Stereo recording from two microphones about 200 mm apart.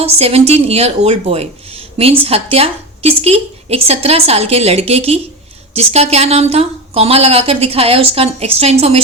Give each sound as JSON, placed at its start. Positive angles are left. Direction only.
{"t": 0.0, "sound": "a woman's voice", "side_deg": -30}